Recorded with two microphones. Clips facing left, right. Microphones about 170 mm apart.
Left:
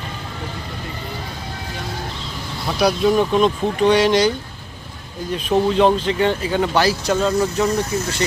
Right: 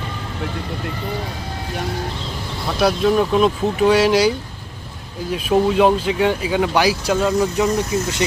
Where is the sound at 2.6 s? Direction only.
Centre (ahead or behind); by 8.1 s 15° right (ahead or behind).